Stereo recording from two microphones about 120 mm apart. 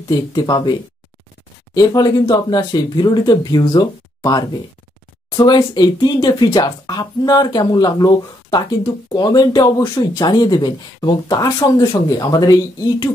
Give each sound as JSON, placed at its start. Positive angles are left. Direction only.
{"t": 0.1, "sound": "speech", "side_deg": 35}